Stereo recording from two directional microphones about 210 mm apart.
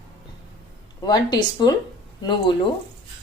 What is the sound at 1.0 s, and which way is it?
Speech, 20° left (ahead or behind).